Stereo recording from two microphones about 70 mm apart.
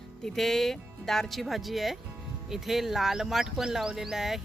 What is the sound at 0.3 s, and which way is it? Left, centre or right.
Speech, centre.